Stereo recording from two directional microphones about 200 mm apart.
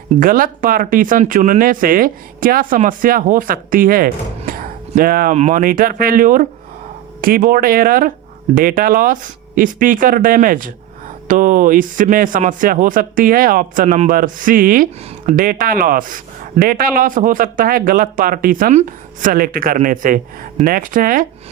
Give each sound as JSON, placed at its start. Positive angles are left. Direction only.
{"t": 0.2, "sound": "speech", "side_deg": -45}